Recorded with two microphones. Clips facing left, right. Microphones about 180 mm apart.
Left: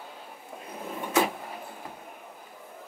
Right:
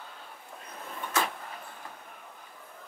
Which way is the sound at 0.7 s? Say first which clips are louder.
Left 6 dB; 15° left (ahead or behind).